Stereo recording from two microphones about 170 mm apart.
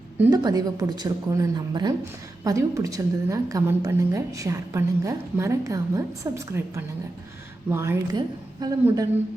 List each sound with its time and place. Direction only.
0.2 s a woman's voice: 20° right (ahead or behind)